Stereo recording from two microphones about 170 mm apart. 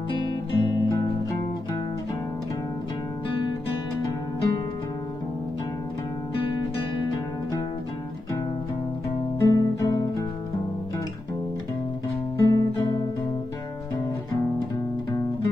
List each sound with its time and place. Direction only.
0.6 s music: 25° left (ahead or behind)
9.4 s guitar: 20° left (ahead or behind)
12.4 s guitar: 20° left (ahead or behind)